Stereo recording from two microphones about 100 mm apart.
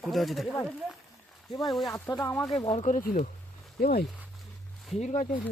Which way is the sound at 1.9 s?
30° left (ahead or behind).